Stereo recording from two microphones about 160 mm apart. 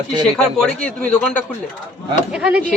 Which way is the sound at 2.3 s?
5° right (ahead or behind).